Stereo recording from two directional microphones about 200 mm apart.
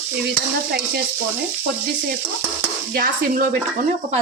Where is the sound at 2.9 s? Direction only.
45° right (ahead or behind).